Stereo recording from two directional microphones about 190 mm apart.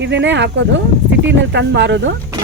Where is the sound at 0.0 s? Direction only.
70° right (ahead or behind).